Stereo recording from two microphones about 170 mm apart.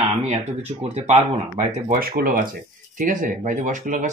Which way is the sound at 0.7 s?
40° right (ahead or behind).